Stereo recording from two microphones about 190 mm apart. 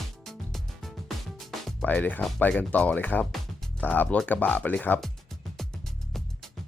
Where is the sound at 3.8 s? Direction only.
10° left (ahead or behind).